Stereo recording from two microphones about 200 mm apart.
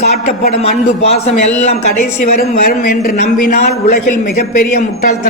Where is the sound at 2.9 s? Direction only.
50° left (ahead or behind).